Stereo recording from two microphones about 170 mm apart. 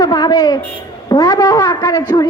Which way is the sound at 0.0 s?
25° left (ahead or behind).